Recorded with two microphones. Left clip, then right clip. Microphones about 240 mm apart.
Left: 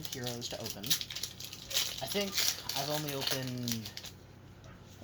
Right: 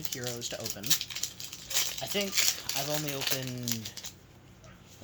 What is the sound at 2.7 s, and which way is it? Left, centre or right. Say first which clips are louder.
Speech: right 2 dB; right.